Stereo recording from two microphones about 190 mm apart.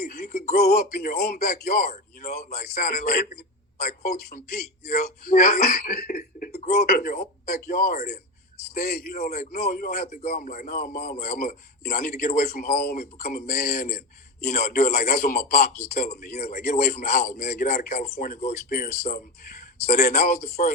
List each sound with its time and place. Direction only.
0.0 s music: 45° left (ahead or behind)
0.5 s a man's voice: 55° left (ahead or behind)
1.9 s speech: 35° left (ahead or behind)
2.4 s a man's voice: 55° left (ahead or behind)
3.8 s speech: 40° left (ahead or behind)
4.3 s a man's voice: 55° left (ahead or behind)
6.7 s a man's voice: 55° left (ahead or behind)